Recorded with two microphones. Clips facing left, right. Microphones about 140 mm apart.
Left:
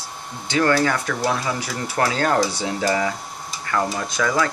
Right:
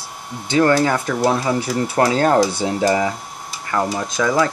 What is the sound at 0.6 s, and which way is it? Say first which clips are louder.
Speech: right 4 dB; 25° right (ahead or behind).